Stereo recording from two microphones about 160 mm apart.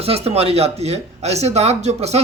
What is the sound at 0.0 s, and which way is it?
Speech, 40° right (ahead or behind).